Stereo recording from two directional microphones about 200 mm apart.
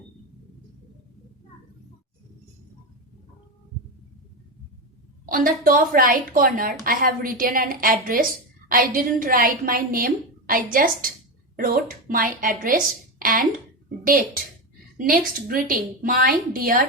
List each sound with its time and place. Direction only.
5.3 s a woman's voice: 45° right (ahead or behind)